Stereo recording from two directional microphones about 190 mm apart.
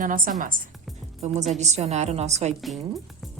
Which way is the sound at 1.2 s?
35° right (ahead or behind).